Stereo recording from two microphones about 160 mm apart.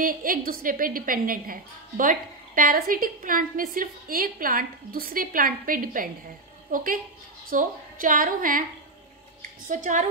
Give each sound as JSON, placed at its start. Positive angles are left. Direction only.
{"t": 0.0, "sound": "a woman's voice", "side_deg": -60}